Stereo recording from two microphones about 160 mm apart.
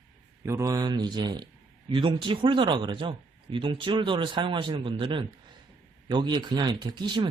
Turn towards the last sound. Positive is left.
turn(degrees=-30)  # may be behind; listen again after turning